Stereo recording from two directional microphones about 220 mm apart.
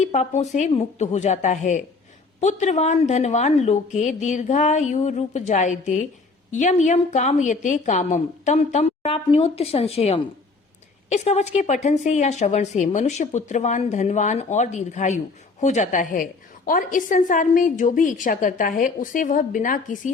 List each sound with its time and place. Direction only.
0.0 s a woman's voice: 30° left (ahead or behind)